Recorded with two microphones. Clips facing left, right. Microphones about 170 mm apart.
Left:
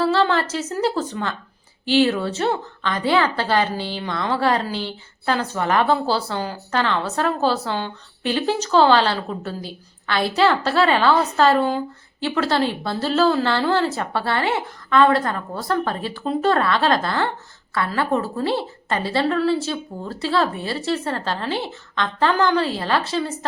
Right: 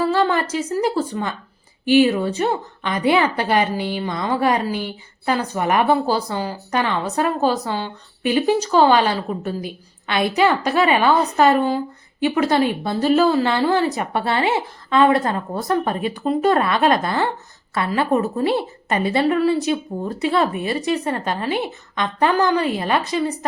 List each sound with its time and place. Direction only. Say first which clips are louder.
0.0 s a woman's voice: even; 15° right (ahead or behind)